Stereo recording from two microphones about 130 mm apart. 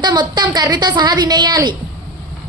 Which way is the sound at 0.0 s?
35° right (ahead or behind).